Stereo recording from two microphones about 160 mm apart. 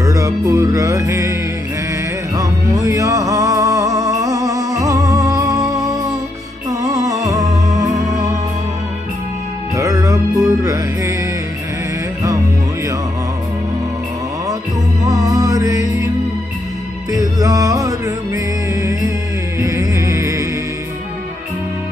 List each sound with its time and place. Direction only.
0.0 s music: 20° right (ahead or behind)
2.3 s music: 20° right (ahead or behind)
9.8 s music: 20° right (ahead or behind)
15.0 s music: 20° right (ahead or behind)
17.1 s music: 20° right (ahead or behind)